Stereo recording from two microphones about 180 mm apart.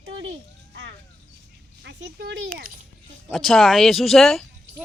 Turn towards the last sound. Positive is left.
turn(degrees=0)  # may be behind; listen again after turning